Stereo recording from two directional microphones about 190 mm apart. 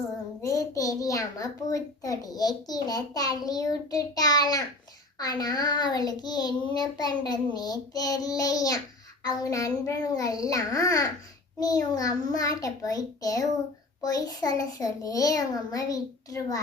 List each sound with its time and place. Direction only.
0.4 s a child's voice: 15° left (ahead or behind)